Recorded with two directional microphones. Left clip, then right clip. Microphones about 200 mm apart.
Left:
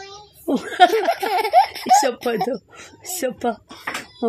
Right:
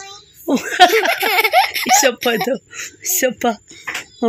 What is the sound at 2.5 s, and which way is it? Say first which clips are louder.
Speech: right 6 dB; 25° right (ahead or behind).